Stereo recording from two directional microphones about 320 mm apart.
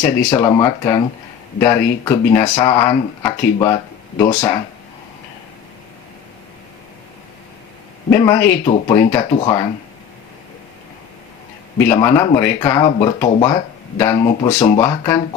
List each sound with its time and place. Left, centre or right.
0.0 s speech: centre
8.1 s speech: centre
11.8 s speech: centre